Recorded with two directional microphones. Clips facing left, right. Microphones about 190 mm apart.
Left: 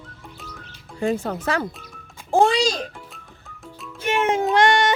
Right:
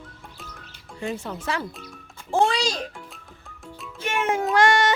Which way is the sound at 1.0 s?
50° left (ahead or behind).